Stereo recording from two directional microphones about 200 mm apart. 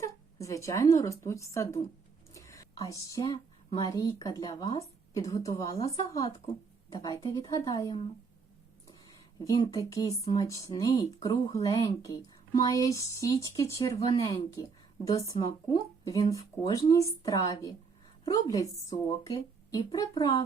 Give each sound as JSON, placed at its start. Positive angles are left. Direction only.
{"t": 0.0, "sound": "a woman's voice", "side_deg": 15}
{"t": 9.4, "sound": "a woman's voice", "side_deg": 20}